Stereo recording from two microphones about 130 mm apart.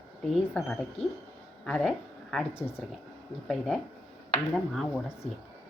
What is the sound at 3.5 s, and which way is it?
Speech, centre (ahead or behind).